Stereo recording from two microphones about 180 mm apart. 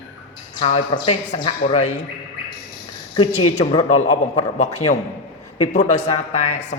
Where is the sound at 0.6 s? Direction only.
35° left (ahead or behind).